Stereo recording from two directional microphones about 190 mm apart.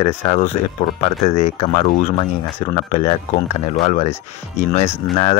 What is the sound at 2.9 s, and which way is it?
Speech, 30° left (ahead or behind).